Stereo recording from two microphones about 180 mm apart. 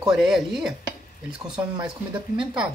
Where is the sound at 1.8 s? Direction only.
25° right (ahead or behind).